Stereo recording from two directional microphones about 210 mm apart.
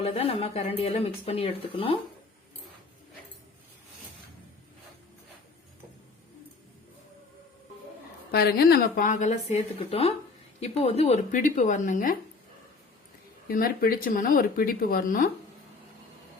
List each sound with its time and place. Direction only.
0.0 s speech: 25° left (ahead or behind)
8.3 s a woman's voice: 50° left (ahead or behind)
13.5 s speech: 45° left (ahead or behind)